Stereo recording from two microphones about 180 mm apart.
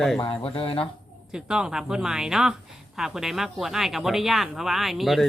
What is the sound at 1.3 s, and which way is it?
Speech, 5° right (ahead or behind).